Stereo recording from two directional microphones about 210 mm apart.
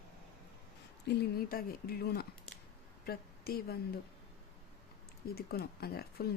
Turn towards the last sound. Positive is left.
turn(degrees=45)  # may be behind; listen again after turning